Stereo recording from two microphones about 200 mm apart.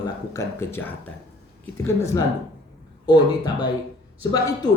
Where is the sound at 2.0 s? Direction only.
15° left (ahead or behind).